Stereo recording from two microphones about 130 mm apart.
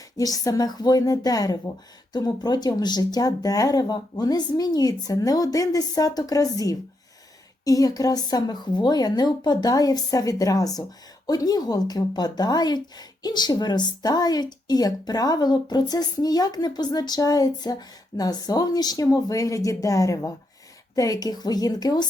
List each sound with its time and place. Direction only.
0.2 s speech: 30° left (ahead or behind)